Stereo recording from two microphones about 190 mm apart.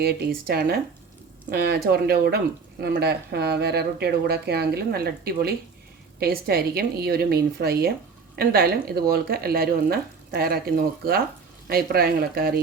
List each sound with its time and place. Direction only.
0.0 s speech: 55° right (ahead or behind)